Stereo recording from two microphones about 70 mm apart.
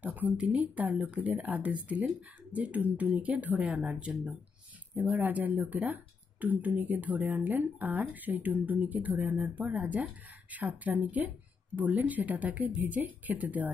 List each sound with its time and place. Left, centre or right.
0.0 s speech: right